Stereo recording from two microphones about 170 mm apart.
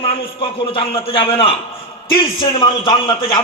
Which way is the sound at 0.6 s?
30° left (ahead or behind).